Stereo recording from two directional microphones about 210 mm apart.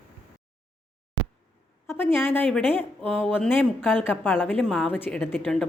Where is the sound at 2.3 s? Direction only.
5° left (ahead or behind).